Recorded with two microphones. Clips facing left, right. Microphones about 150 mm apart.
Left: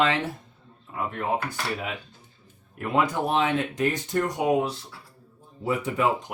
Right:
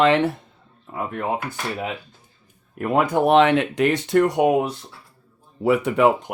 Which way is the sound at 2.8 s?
50° right (ahead or behind).